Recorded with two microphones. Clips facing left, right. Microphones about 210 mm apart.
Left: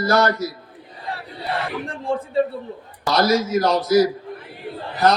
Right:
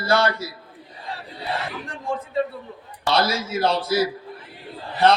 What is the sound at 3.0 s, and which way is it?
A man's voice, 30° right (ahead or behind).